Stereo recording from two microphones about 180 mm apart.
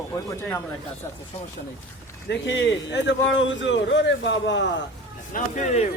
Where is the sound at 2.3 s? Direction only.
85° left.